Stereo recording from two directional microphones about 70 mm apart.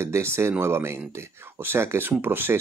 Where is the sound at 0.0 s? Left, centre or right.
Right.